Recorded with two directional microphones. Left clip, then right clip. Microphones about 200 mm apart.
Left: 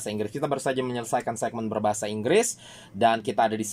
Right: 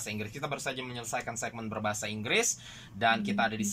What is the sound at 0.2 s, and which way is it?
Speech, 35° left (ahead or behind).